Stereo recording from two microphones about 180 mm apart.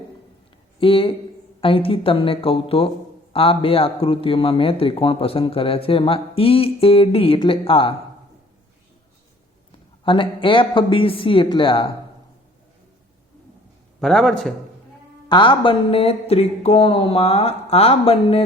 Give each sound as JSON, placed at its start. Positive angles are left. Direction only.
{"t": 0.8, "sound": "a man's voice", "side_deg": 30}
{"t": 10.0, "sound": "speech", "side_deg": 30}
{"t": 14.0, "sound": "a man's voice", "side_deg": 5}
{"t": 15.3, "sound": "a man's voice", "side_deg": 25}